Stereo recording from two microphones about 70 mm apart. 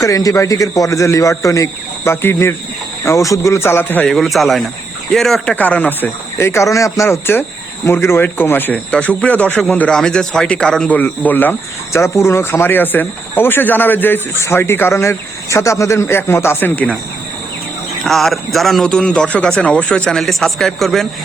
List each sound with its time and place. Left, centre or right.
0.0 s speech: left
4.0 s a man's voice: centre
5.5 s speech: left
6.3 s speech: left
8.7 s a man's voice: centre
9.9 s a man's voice: centre
10.9 s speech: left
11.9 s speech: left
18.0 s a man's voice: centre
20.1 s a man's voice: centre